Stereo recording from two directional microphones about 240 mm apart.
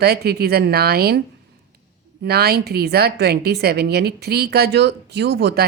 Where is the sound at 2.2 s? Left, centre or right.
Right.